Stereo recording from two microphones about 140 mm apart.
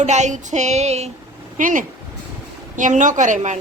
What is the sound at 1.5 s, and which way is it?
Speech, 70° right (ahead or behind).